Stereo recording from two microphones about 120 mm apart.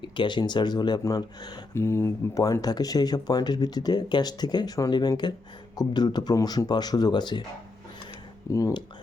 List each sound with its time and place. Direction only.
0.0 s speech: 40° left (ahead or behind)
1.7 s speech: 20° left (ahead or behind); by 7.4 s 40° left (ahead or behind)
8.5 s speech: 30° left (ahead or behind)